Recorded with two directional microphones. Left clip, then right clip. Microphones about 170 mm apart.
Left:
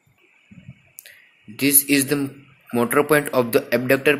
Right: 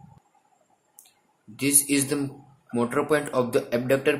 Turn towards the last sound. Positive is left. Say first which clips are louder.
# left 5 dB
turn(degrees=25)  # may be behind; listen again after turning